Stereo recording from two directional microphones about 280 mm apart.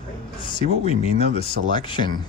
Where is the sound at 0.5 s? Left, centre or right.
Left.